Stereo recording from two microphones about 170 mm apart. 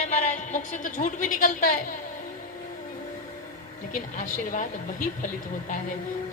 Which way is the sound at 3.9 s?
55° left (ahead or behind).